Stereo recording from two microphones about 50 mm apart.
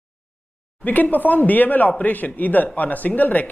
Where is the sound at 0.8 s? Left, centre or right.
Left.